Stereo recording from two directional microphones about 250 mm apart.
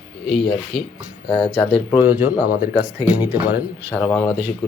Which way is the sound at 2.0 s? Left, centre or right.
Centre.